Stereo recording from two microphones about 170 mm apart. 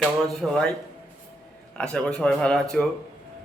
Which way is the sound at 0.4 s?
5° right (ahead or behind).